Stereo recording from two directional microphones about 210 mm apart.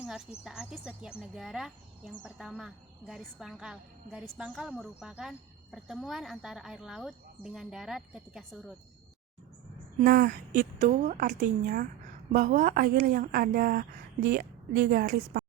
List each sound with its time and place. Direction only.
0.0 s speech: 5° right (ahead or behind)
10.0 s a woman's voice: 40° right (ahead or behind)